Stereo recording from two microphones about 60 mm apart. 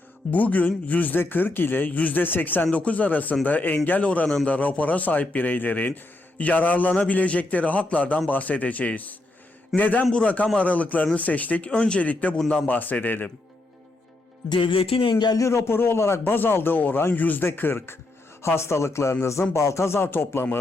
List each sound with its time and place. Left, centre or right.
0.3 s a man's voice: left
15.3 s speech: left
18.4 s speech: left